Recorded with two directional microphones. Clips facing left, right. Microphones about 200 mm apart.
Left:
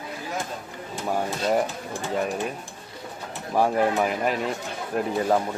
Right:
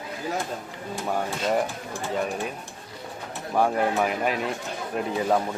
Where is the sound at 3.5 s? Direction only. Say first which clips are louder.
Left 1 dB; centre (ahead or behind).